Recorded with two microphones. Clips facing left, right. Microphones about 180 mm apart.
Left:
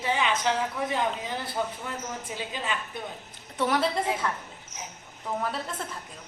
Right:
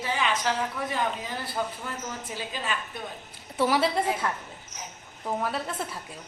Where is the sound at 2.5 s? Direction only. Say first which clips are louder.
Even; 20° left (ahead or behind).